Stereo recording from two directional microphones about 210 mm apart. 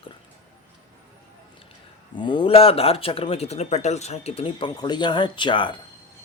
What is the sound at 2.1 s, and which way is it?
A man's voice, 20° left (ahead or behind).